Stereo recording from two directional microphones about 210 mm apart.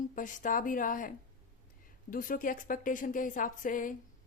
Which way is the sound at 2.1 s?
40° left (ahead or behind).